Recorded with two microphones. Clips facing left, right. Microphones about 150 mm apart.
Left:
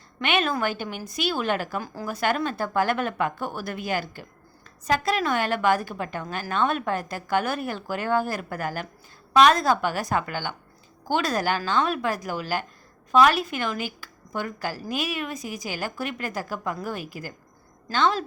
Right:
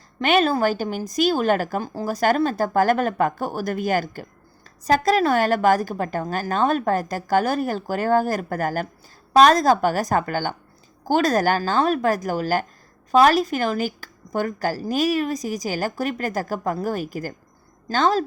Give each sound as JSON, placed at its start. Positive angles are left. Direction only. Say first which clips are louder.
{"t": 0.2, "sound": "a woman's voice", "louder": "right 6 dB", "side_deg": -40}
{"t": 1.8, "sound": "a woman's voice", "louder": "right 5 dB", "side_deg": -30}